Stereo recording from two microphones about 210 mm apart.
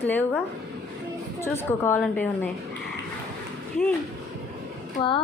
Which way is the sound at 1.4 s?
10° left (ahead or behind).